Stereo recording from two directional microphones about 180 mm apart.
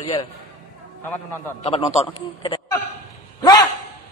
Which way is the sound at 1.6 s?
35° left (ahead or behind).